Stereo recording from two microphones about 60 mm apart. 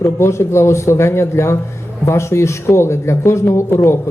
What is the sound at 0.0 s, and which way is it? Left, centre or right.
Speech, left.